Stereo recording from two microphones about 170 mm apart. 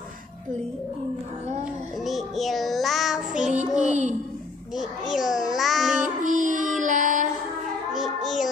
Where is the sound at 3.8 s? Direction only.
45° right (ahead or behind).